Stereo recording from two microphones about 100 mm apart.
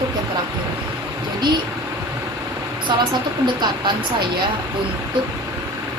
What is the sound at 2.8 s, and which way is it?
Speech, 55° right (ahead or behind).